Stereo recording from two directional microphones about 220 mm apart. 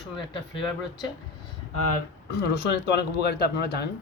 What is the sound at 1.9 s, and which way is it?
Speech, 50° left (ahead or behind).